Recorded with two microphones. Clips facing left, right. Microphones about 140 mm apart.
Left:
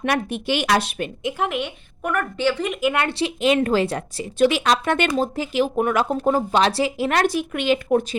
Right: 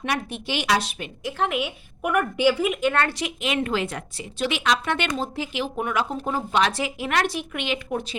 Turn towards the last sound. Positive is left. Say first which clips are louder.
# left 7 dB
turn(degrees=40)  # may be behind; listen again after turning